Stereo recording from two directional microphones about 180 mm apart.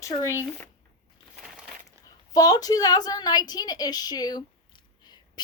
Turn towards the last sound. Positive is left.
turn(degrees=25)  # may be behind; listen again after turning